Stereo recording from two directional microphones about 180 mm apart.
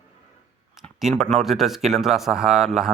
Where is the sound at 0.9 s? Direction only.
Centre (ahead or behind).